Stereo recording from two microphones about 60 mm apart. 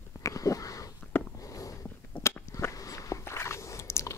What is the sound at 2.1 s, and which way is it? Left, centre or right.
Biting, left.